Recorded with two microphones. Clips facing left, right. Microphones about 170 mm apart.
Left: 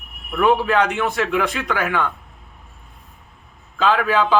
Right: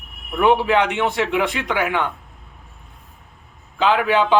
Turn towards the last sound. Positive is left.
turn(degrees=-20)  # may be behind; listen again after turning